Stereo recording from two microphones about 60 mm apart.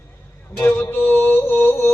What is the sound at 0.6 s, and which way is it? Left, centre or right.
Music, left.